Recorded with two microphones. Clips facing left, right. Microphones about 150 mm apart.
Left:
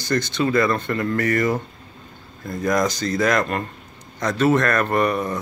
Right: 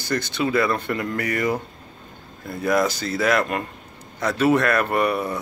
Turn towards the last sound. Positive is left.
turn(degrees=-10)  # may be behind; listen again after turning